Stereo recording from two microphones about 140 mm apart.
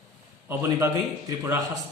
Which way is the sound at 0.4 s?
20° right (ahead or behind).